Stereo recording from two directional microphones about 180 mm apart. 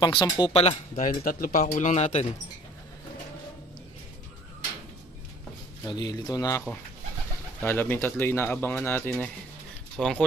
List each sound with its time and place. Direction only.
0.2 s speech: 30° left (ahead or behind)
1.0 s speech: 50° left (ahead or behind)
5.9 s speech: 20° left (ahead or behind)
7.6 s speech: 10° left (ahead or behind)